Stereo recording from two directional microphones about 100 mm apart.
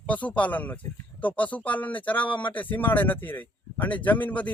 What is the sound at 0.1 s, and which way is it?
Speech, 15° left (ahead or behind).